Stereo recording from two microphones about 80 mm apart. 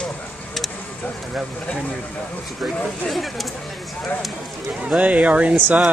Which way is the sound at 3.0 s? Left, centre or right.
Centre.